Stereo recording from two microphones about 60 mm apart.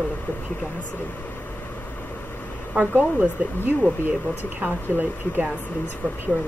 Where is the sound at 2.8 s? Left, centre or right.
Right.